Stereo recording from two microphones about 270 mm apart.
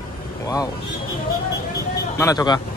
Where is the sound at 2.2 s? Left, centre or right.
Centre.